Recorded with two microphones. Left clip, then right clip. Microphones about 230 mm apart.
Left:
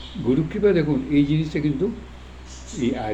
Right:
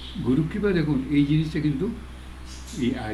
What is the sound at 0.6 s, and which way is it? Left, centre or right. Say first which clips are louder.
Speech: left 5 dB; centre.